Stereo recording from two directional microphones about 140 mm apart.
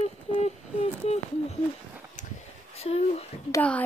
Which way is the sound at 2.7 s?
50° left (ahead or behind).